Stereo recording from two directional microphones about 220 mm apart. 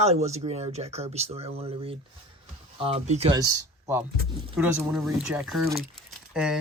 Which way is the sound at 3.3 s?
15° right (ahead or behind).